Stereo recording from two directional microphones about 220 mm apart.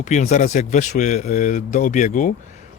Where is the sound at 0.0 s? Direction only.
35° left (ahead or behind).